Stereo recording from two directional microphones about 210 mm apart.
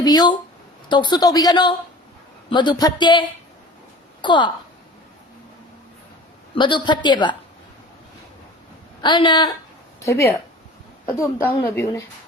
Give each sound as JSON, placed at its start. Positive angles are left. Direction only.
{"t": 0.0, "sound": "a woman's voice", "side_deg": 20}
{"t": 6.6, "sound": "a woman's voice", "side_deg": 20}
{"t": 9.0, "sound": "a woman's voice", "side_deg": 20}